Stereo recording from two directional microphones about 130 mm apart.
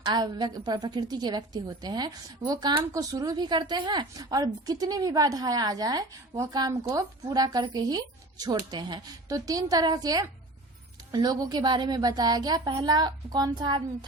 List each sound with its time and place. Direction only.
0.0 s a woman's voice: 35° right (ahead or behind)